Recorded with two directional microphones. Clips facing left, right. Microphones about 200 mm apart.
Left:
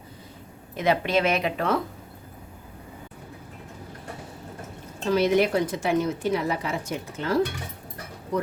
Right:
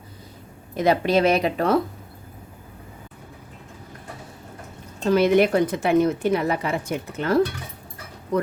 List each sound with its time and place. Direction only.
0.8 s speech: 35° right (ahead or behind)
5.1 s a woman's voice: 55° right (ahead or behind)